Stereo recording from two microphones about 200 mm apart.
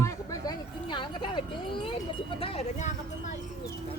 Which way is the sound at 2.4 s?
30° left (ahead or behind).